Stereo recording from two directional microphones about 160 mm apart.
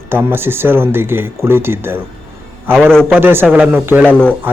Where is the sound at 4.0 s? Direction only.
5° left (ahead or behind).